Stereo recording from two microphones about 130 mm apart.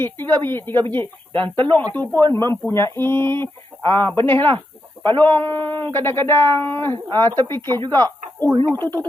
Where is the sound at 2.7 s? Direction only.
20° left (ahead or behind).